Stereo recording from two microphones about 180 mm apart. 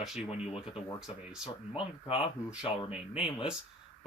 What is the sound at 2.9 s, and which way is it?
Speech, 5° right (ahead or behind).